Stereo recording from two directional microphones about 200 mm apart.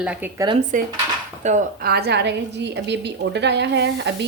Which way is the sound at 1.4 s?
50° right (ahead or behind).